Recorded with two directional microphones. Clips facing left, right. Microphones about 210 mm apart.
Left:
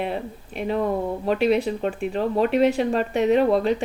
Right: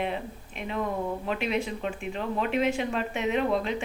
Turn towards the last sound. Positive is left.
turn(degrees=40)  # may be behind; listen again after turning